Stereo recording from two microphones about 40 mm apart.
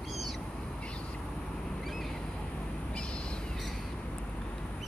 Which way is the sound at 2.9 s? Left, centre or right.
Left.